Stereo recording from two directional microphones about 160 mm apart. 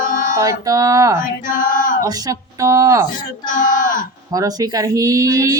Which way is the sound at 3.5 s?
55° left (ahead or behind).